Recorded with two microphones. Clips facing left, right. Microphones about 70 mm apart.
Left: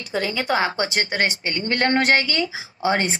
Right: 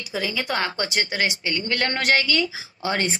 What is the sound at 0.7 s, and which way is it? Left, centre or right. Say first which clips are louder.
A woman's voice: left 3 dB; left.